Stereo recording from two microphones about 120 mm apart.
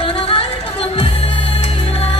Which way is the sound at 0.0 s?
50° left (ahead or behind).